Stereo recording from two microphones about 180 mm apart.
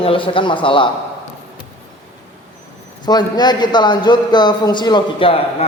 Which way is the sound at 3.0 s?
25° left (ahead or behind).